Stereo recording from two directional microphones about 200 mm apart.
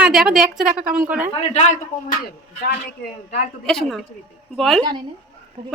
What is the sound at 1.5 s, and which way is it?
Speech, 35° left (ahead or behind).